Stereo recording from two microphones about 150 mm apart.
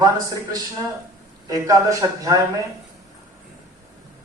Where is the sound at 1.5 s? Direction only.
20° right (ahead or behind).